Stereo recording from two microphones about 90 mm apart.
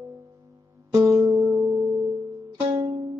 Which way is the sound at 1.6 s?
20° right (ahead or behind).